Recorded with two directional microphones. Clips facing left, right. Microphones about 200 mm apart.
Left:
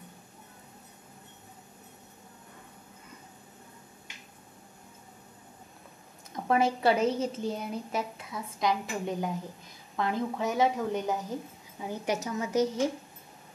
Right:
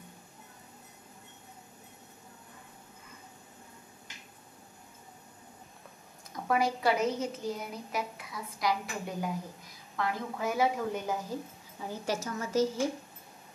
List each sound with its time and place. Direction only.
6.3 s a woman's voice: 25° left (ahead or behind)